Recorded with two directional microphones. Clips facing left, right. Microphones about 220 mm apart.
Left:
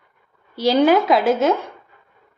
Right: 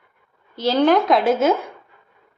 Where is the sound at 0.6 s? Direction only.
10° left (ahead or behind).